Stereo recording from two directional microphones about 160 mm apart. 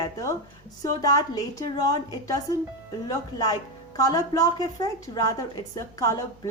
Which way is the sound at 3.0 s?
20° left (ahead or behind).